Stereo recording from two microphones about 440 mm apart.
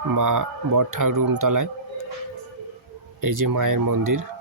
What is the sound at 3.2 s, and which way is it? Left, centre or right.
Speech, right.